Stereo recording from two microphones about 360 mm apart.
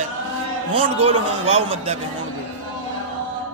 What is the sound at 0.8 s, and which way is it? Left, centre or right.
Music, centre.